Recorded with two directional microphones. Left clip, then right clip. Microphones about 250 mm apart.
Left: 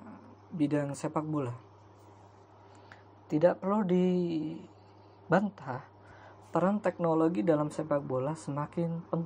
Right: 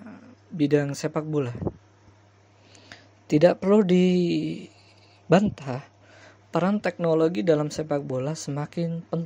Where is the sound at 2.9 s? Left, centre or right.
Right.